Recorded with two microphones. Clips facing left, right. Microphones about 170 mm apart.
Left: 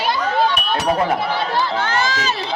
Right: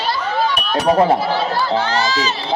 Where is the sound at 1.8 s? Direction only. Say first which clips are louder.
Right 2 dB; 50° left (ahead or behind).